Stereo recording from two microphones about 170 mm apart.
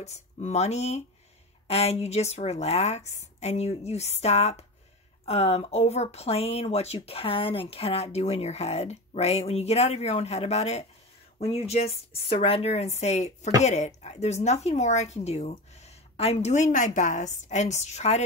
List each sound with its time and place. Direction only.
0.0 s speech: 40° left (ahead or behind)